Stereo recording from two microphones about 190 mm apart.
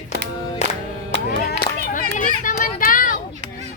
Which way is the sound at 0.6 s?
35° left (ahead or behind).